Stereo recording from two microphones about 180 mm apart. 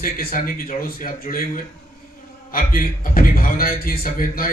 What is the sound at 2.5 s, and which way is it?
A man's voice, 50° left (ahead or behind).